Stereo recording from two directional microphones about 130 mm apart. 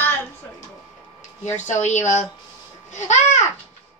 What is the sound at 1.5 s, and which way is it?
A woman's voice, 65° left (ahead or behind).